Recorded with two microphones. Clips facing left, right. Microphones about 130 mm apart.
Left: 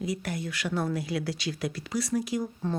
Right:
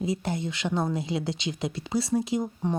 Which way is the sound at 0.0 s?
25° right (ahead or behind).